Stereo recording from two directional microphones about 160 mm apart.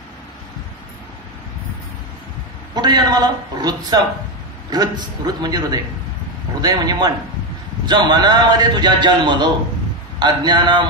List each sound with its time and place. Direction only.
2.7 s a man's voice: 25° right (ahead or behind)